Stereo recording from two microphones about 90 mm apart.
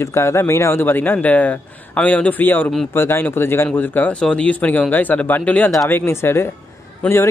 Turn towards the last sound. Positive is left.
turn(degrees=15)  # may be behind; listen again after turning